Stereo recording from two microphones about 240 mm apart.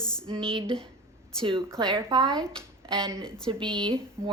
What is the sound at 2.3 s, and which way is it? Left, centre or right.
A woman's voice, centre.